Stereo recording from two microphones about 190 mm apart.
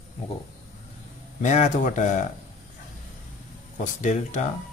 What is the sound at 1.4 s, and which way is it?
Speech, 40° left (ahead or behind).